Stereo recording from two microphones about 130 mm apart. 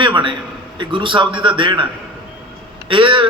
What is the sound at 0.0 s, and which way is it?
A man's voice, 40° right (ahead or behind).